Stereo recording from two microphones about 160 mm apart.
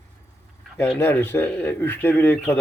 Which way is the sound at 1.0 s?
15° left (ahead or behind).